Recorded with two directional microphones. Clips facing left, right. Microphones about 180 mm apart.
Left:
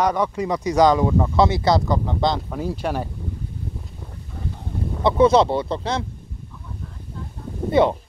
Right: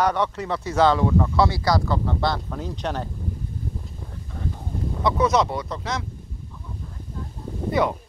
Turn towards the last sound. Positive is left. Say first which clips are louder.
# left 5 dB
turn(degrees=25)  # may be behind; listen again after turning